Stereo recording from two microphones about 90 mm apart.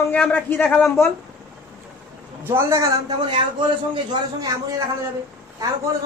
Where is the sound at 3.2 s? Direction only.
60° right (ahead or behind).